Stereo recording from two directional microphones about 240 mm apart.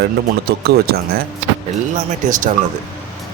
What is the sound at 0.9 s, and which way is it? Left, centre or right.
Speech, right.